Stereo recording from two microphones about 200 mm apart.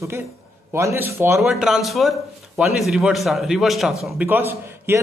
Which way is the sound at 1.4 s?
Centre (ahead or behind).